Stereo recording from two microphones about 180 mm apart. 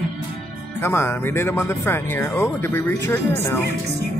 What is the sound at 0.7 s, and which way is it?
Speech, 15° left (ahead or behind).